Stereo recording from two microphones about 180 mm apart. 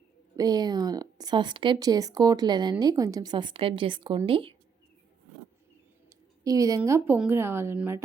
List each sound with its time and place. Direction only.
0.3 s speech: 20° right (ahead or behind)
6.1 s a woman's voice: 20° right (ahead or behind)